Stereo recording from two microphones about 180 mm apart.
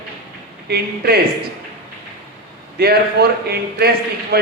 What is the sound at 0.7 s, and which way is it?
Speech, 60° right (ahead or behind).